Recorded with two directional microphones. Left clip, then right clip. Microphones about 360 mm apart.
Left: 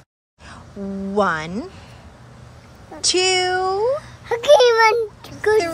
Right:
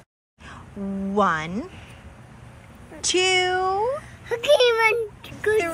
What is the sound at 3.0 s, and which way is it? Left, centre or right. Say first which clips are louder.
Speech: left 2 dB; centre.